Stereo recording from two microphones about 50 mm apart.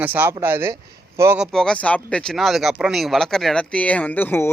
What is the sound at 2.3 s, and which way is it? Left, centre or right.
Speech, centre.